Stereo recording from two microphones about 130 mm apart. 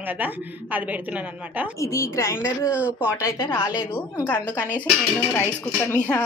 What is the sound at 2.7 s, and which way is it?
Speech, 10° right (ahead or behind).